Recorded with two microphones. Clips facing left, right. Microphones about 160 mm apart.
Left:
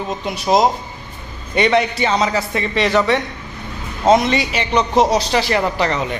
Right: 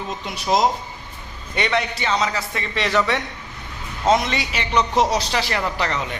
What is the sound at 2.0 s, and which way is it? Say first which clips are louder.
Speech: left 5 dB; 40° left (ahead or behind).